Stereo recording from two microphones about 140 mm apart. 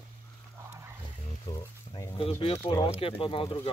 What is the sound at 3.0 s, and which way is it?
Speech, 40° left (ahead or behind).